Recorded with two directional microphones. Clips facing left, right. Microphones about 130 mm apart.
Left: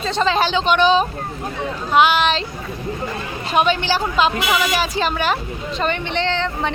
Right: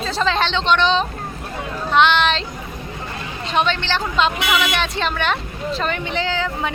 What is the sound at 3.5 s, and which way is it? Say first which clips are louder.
A woman's voice: left 3 dB; 10° left (ahead or behind).